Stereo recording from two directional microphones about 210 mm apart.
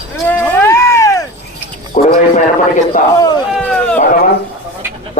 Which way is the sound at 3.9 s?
40° left (ahead or behind).